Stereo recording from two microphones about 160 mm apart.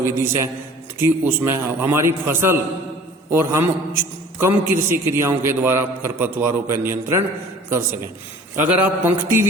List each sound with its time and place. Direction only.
0.0 s a man's voice: 15° right (ahead or behind)
8.5 s a man's voice: 10° right (ahead or behind)